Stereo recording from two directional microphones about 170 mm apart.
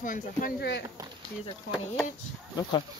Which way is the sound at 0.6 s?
90° left.